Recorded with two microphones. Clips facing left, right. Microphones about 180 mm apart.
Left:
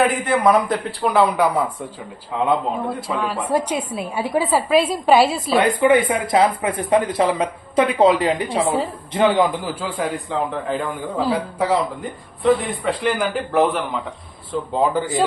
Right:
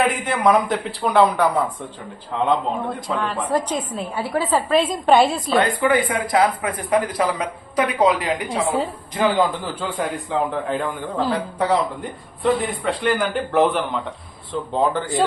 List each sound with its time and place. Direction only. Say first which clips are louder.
0.0 s a man's voice: left 2 dB; centre (ahead or behind)
5.5 s speech: left 3 dB; 20° left (ahead or behind)
8.5 s a man's voice: left 2 dB; centre (ahead or behind)
9.1 s speech: left 2 dB; 25° left (ahead or behind)
9.8 s a man's voice: right 1 dB; centre (ahead or behind)